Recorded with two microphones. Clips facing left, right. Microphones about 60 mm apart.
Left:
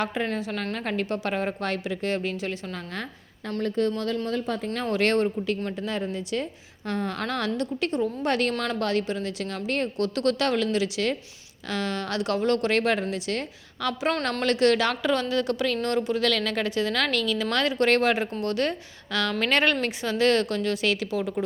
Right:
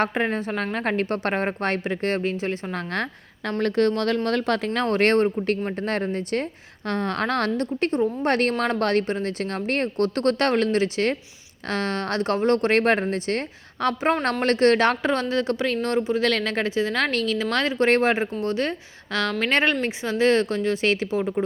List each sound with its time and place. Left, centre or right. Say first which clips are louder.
0.0 s speech: right 4 dB; right
2.7 s a woman's voice: right 7 dB; right
4.7 s a woman's voice: right 3 dB; right